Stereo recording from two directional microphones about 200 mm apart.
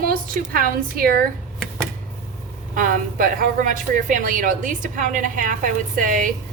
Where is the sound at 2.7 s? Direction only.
45° right (ahead or behind).